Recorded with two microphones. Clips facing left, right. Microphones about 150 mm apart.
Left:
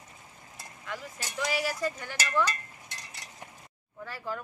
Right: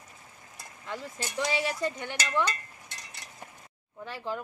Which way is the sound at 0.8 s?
30° right (ahead or behind).